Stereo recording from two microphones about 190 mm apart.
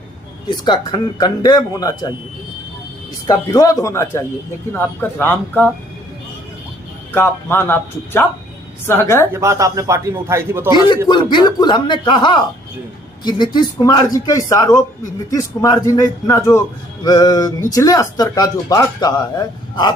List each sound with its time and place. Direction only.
0.4 s a man's voice: 25° left (ahead or behind)
3.2 s speech: 20° left (ahead or behind)
7.1 s speech: 10° left (ahead or behind)
9.3 s a man's voice: 15° right (ahead or behind)
11.1 s a man's voice: 25° left (ahead or behind)